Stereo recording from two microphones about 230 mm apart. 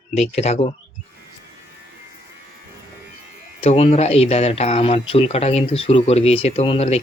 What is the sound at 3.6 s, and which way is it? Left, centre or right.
Speech, left.